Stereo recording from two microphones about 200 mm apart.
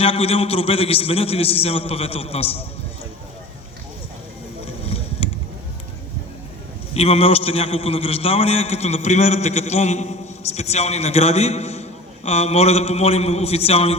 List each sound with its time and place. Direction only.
0.0 s a man's voice: 30° left (ahead or behind)
4.6 s a sound: 30° left (ahead or behind)
6.9 s a man's voice: 30° left (ahead or behind)